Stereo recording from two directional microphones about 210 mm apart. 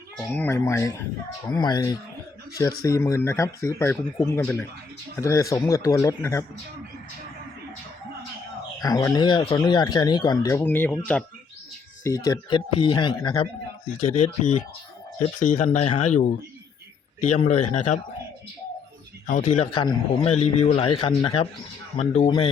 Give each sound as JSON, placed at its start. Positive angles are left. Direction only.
{"t": 0.3, "sound": "speech", "side_deg": 10}
{"t": 8.8, "sound": "speech", "side_deg": 15}
{"t": 10.6, "sound": "speech", "side_deg": 10}
{"t": 19.3, "sound": "speech", "side_deg": 35}